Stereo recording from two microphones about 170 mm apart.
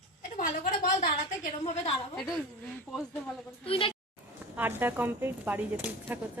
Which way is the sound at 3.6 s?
35° left (ahead or behind).